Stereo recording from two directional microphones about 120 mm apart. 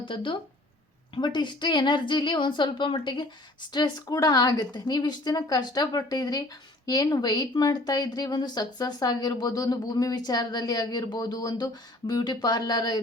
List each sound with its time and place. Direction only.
0.0 s a woman's voice: 45° left (ahead or behind)